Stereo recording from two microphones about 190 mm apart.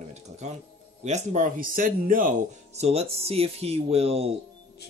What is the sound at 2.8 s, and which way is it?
Speech, 35° right (ahead or behind).